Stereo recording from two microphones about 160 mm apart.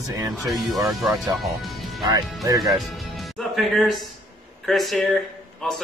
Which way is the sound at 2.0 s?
20° right (ahead or behind).